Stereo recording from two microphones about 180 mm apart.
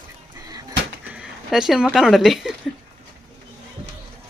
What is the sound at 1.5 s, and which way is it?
Speech, 5° right (ahead or behind).